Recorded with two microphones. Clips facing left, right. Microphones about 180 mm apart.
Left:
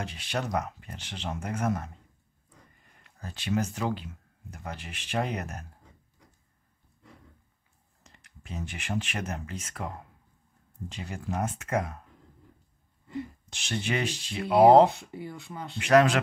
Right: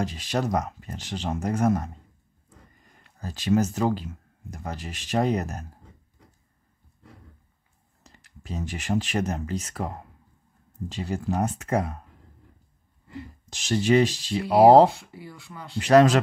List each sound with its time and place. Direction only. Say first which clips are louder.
0.0 s speech: right 6 dB; 40° right (ahead or behind)
3.0 s speech: right 6 dB; 35° right (ahead or behind)
8.0 s speech: right 5 dB; 35° right (ahead or behind)
13.5 s speech: right 11 dB; 40° right (ahead or behind)
14.9 s speech: left 1 dB; 20° left (ahead or behind)
15.8 s speech: right 4 dB; 35° right (ahead or behind)